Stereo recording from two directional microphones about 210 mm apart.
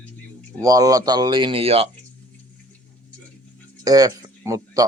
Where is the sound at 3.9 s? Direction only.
15° right (ahead or behind).